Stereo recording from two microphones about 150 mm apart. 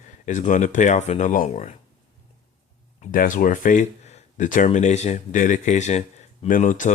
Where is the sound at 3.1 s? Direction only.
65° left (ahead or behind).